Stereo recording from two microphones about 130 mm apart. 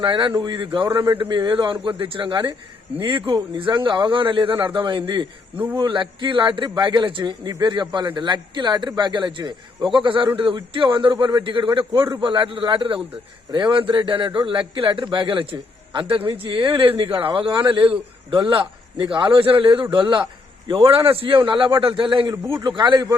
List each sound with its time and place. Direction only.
0.0 s a man's voice: 40° right (ahead or behind)